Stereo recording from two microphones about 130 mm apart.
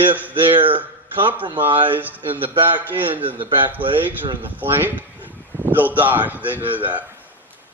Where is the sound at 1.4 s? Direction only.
40° right (ahead or behind).